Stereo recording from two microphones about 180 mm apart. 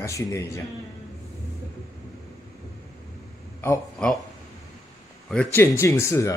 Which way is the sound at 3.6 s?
10° left (ahead or behind).